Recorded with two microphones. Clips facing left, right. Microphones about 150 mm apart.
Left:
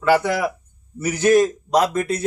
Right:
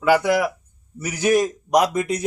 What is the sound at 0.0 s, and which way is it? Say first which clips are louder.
A man's voice: even; 10° right (ahead or behind).